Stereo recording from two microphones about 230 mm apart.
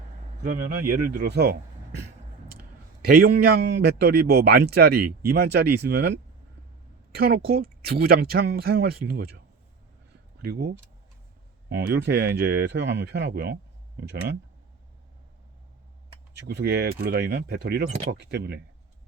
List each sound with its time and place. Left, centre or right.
0.4 s speech: right
3.0 s a man's voice: right
10.4 s a man's voice: right
11.7 s a man's voice: right
16.5 s a man's voice: right